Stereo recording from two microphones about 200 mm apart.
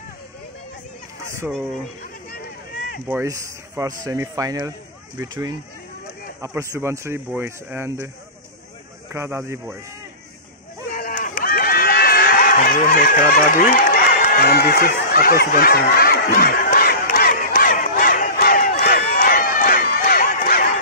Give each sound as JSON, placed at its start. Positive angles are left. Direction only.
{"t": 3.1, "sound": "speech", "side_deg": -10}
{"t": 9.1, "sound": "speech", "side_deg": -15}
{"t": 10.9, "sound": "a sound", "side_deg": 45}